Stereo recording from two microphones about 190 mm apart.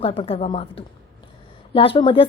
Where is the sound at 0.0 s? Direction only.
30° left (ahead or behind).